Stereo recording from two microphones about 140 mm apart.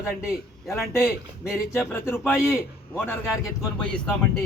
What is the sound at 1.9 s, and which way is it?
A man's voice, 15° left (ahead or behind).